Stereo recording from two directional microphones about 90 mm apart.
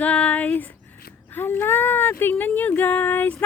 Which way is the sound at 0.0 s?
15° left (ahead or behind).